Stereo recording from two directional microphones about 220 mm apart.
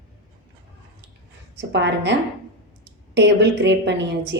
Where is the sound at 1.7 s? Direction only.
50° right (ahead or behind).